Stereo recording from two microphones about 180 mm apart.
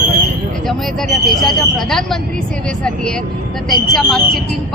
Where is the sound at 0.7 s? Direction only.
Centre (ahead or behind).